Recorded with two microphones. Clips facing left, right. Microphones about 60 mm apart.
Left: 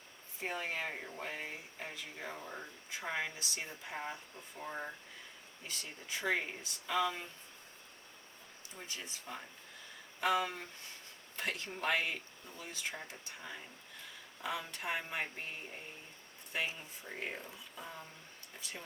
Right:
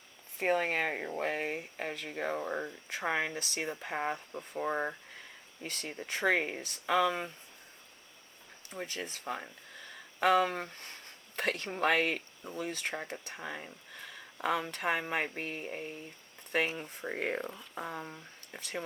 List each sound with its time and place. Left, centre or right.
0.3 s speech: right
8.7 s speech: right